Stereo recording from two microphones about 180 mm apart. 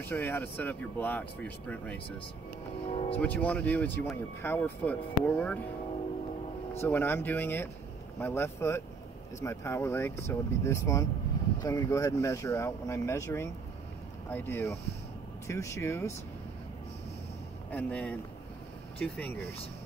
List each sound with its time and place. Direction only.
0.0 s speech: 10° left (ahead or behind)
2.9 s speech: 35° left (ahead or behind)
3.2 s speech: 5° left (ahead or behind)
6.8 s speech: 10° left (ahead or behind)
17.6 s speech: 5° left (ahead or behind)